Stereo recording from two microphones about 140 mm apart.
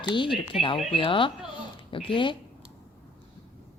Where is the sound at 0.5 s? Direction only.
5° right (ahead or behind).